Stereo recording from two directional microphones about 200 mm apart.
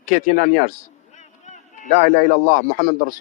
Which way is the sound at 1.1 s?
35° left (ahead or behind).